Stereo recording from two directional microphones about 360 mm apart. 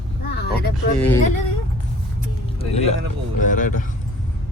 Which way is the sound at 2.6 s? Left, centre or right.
Centre.